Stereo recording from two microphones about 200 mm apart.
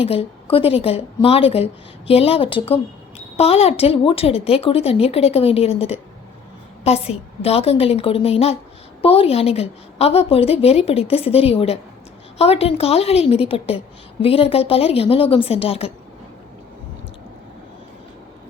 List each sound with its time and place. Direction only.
0.0 s a woman's voice: 30° left (ahead or behind)